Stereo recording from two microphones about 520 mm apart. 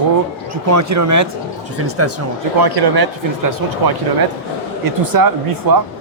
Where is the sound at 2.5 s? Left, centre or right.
Right.